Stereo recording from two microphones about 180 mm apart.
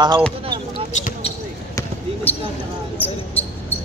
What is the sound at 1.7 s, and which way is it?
Basketball bounce, 10° left (ahead or behind).